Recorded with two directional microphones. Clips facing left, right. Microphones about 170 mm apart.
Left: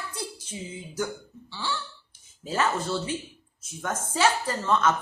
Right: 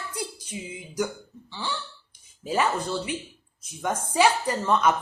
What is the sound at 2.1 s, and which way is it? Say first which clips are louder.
Speech: right 4 dB; 15° right (ahead or behind).